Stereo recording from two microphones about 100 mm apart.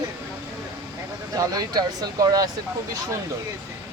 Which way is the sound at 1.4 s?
40° right (ahead or behind).